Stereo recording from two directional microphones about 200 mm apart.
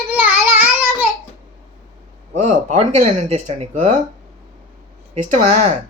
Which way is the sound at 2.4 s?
35° right (ahead or behind).